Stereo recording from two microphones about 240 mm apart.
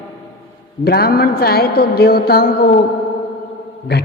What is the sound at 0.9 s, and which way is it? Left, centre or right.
A woman's voice, left.